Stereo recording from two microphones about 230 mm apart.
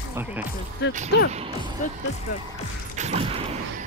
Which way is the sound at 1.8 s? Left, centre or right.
Left.